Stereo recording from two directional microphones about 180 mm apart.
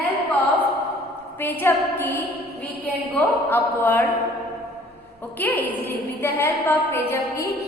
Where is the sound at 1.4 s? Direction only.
10° left (ahead or behind).